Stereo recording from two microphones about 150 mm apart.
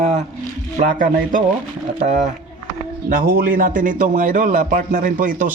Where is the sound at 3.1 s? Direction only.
75° right (ahead or behind).